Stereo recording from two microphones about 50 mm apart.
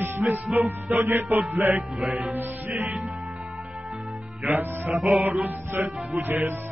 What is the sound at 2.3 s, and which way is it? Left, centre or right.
Speech, right.